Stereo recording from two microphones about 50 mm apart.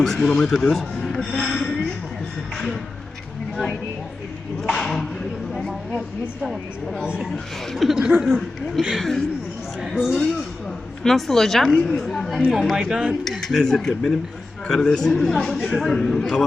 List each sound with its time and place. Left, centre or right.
0.0 s speech: centre
1.0 s a sound: centre
4.6 s a sound: centre
7.0 s speech: centre
7.7 s speech: centre
9.8 s speech: centre
11.0 s speech: centre
12.7 s speech: centre
13.4 s speech: centre